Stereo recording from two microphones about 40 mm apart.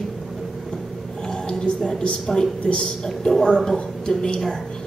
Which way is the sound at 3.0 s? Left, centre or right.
Centre.